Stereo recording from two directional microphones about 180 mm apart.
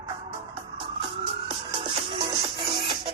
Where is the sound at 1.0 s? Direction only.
30° right (ahead or behind).